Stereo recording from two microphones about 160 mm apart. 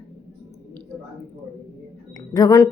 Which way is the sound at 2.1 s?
20° left (ahead or behind).